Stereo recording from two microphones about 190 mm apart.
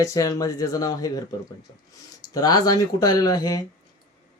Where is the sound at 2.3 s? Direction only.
20° left (ahead or behind).